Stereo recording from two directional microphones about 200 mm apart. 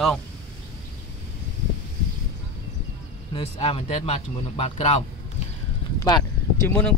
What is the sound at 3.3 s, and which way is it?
Speech, 30° left (ahead or behind).